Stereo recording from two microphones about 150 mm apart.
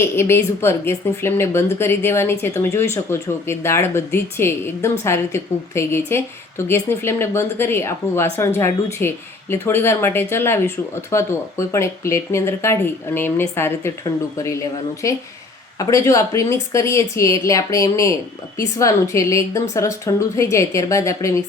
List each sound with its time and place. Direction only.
0.0 s a woman's voice: 15° left (ahead or behind)